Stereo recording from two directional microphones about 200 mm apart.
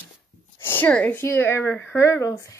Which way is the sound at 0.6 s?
10° left (ahead or behind).